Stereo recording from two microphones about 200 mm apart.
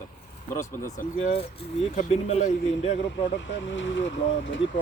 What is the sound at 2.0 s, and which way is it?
Speech, 35° left (ahead or behind).